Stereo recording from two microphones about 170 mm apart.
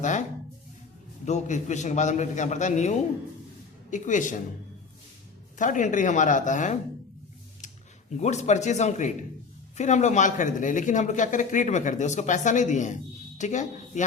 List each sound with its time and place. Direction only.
0.0 s speech: 45° left (ahead or behind)
5.5 s speech: 50° left (ahead or behind)
8.1 s speech: 40° left (ahead or behind)